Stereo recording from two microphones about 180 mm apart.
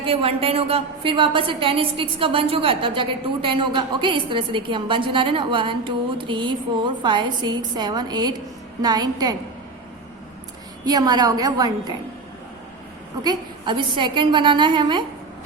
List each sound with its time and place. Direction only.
0.0 s a woman's voice: 30° right (ahead or behind)
10.8 s a woman's voice: 20° right (ahead or behind)
13.2 s a woman's voice: 25° right (ahead or behind)